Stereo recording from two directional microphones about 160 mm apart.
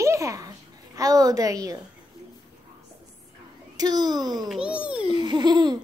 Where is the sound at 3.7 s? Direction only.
25° right (ahead or behind).